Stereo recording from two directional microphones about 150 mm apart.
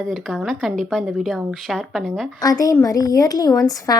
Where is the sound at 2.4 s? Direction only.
25° left (ahead or behind).